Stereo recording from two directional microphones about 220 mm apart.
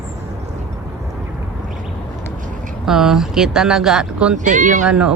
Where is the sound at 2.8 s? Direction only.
Centre (ahead or behind).